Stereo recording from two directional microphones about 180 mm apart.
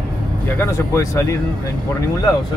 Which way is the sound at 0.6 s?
15° left (ahead or behind).